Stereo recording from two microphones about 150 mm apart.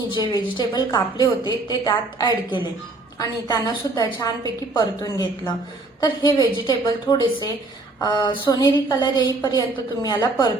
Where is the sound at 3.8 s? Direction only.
25° left (ahead or behind).